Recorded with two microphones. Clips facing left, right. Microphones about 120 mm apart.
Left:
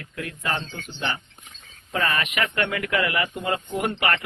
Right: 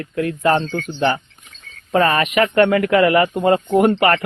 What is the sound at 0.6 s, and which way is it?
Speech, 60° right (ahead or behind).